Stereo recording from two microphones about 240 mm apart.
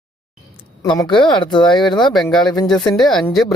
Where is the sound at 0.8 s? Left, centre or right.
Centre.